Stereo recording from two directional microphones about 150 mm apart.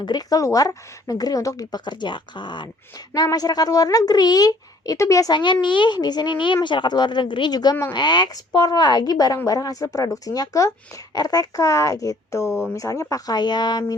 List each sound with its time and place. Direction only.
0.0 s speech: 25° left (ahead or behind)